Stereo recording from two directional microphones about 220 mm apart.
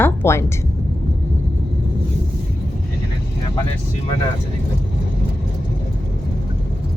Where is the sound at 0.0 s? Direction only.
10° left (ahead or behind).